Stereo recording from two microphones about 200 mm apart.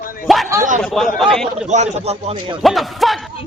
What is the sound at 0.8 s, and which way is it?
Speech, centre (ahead or behind).